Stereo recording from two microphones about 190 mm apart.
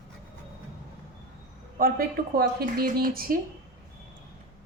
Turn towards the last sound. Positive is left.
turn(degrees=-50)  # may be behind; listen again after turning